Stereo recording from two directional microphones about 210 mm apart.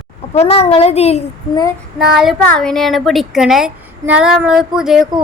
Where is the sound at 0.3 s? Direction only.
30° left (ahead or behind).